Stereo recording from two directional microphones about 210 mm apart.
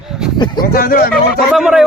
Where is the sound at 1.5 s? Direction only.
Centre (ahead or behind).